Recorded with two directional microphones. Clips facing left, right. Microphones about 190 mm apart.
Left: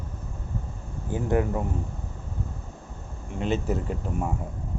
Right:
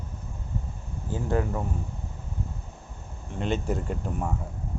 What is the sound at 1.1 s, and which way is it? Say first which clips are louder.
Speech: left 3 dB; 20° left (ahead or behind).